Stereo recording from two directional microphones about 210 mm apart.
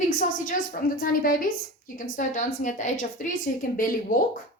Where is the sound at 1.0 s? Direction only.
45° left (ahead or behind).